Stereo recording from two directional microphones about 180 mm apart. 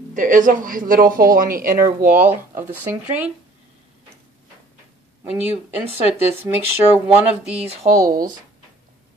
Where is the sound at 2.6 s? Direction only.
10° right (ahead or behind).